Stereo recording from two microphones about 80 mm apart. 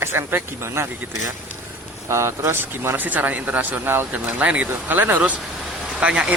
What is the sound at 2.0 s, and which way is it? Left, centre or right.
Speech, right.